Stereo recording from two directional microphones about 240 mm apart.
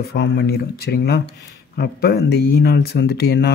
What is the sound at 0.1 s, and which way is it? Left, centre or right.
Speech, left.